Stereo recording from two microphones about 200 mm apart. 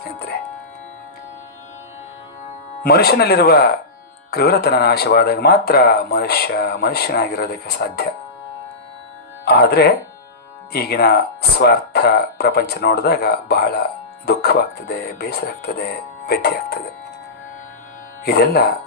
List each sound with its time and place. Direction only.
2.8 s speech: 50° left (ahead or behind)
9.4 s speech: 55° left (ahead or behind)
18.3 s speech: 50° left (ahead or behind)